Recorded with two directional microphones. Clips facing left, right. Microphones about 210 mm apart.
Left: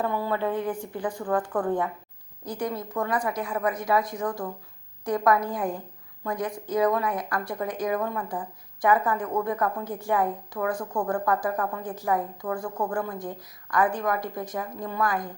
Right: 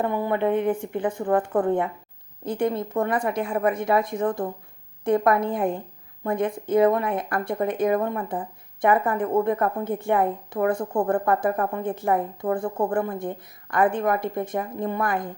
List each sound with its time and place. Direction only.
0.0 s a woman's voice: 20° right (ahead or behind)